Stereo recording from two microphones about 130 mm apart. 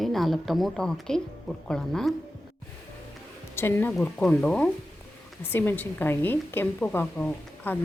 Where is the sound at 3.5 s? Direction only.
15° left (ahead or behind).